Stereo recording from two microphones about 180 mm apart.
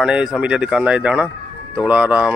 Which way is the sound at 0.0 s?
5° right (ahead or behind).